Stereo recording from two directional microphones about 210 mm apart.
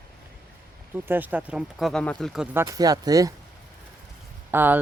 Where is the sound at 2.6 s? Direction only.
15° right (ahead or behind).